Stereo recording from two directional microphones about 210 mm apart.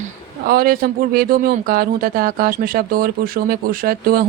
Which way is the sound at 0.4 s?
45° right (ahead or behind).